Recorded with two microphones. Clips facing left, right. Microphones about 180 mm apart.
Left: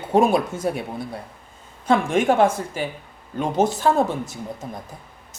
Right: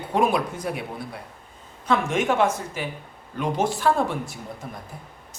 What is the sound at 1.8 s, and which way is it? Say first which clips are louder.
Speech: left 4 dB; 30° left (ahead or behind).